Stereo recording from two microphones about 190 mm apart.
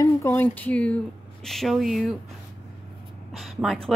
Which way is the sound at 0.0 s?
10° left (ahead or behind).